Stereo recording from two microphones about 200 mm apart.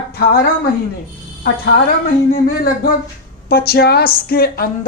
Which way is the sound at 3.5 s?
50° left (ahead or behind).